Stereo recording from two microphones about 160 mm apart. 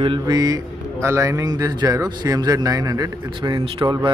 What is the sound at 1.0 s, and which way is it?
Speech, 20° right (ahead or behind).